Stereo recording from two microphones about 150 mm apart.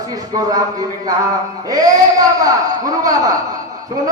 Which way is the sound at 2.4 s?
25° right (ahead or behind).